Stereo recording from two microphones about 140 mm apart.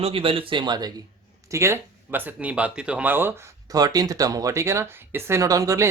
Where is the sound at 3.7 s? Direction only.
25° right (ahead or behind).